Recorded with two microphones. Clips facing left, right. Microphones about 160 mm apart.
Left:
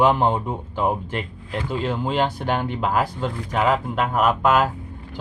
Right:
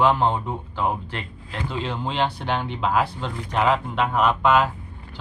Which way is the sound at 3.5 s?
Centre (ahead or behind).